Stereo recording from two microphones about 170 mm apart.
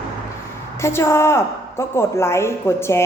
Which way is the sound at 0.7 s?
15° left (ahead or behind).